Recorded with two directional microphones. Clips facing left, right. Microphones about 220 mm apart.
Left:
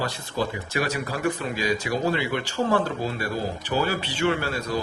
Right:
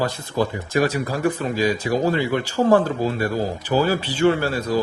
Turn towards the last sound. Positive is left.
turn(degrees=-40)  # may be behind; listen again after turning